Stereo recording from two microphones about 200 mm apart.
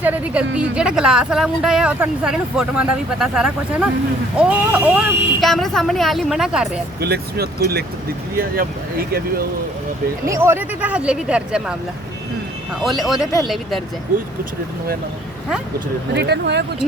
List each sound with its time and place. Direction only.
0.0 s speech: 10° right (ahead or behind)
7.0 s speech: 50° right (ahead or behind)
10.2 s speech: 15° right (ahead or behind)
12.8 s speech: centre (ahead or behind)
16.1 s speech: 55° right (ahead or behind)